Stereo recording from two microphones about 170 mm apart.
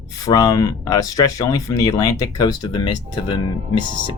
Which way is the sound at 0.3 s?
20° left (ahead or behind).